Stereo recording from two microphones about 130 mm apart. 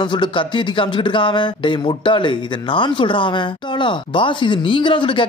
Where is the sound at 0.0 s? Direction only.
40° left (ahead or behind).